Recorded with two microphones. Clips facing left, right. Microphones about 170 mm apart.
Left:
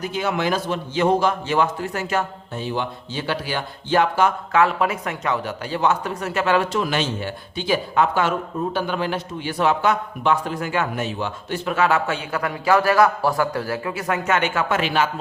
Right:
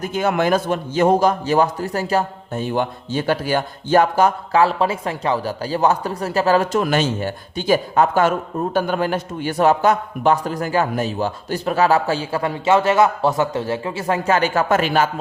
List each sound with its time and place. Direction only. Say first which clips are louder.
0.0 s a man's voice: right 4 dB; 50° right (ahead or behind)
2.6 s a man's voice: right 4 dB; 50° right (ahead or behind)